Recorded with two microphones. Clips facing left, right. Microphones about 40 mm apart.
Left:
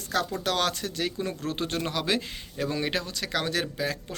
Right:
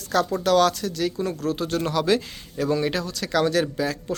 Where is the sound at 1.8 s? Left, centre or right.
Centre.